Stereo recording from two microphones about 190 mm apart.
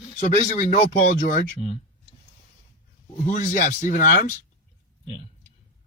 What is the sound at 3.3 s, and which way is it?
Speech, 45° left (ahead or behind).